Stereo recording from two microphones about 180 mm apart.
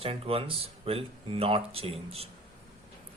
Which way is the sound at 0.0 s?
30° right (ahead or behind).